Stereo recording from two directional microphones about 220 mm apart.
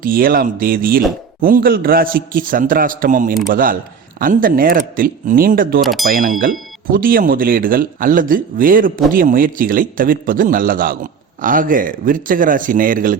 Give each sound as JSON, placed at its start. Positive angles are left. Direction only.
{"t": 0.0, "sound": "a man's voice", "side_deg": -40}
{"t": 5.8, "sound": "speech", "side_deg": 0}
{"t": 6.1, "sound": "a man's voice", "side_deg": -40}